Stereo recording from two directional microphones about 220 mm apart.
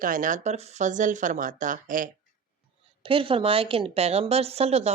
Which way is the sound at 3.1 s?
25° right (ahead or behind).